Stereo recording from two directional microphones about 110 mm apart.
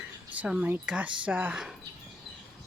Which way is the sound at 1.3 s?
15° right (ahead or behind).